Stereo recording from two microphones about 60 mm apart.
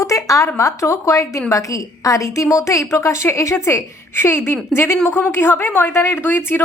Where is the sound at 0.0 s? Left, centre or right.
Left.